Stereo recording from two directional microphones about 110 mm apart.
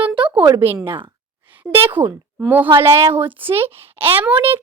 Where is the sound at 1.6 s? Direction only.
15° right (ahead or behind).